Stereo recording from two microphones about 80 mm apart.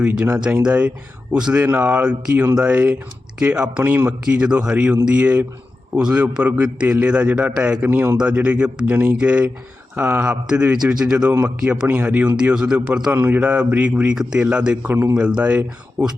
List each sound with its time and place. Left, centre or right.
0.0 s a man's voice: centre
8.2 s a man's voice: centre
9.9 s speech: right
10.2 s a man's voice: centre
15.1 s a man's voice: centre